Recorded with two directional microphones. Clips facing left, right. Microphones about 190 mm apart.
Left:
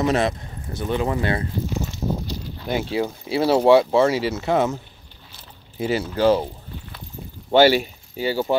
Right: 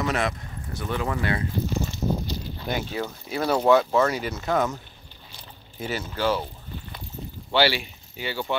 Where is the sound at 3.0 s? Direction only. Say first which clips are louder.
Left 6 dB; 10° left (ahead or behind).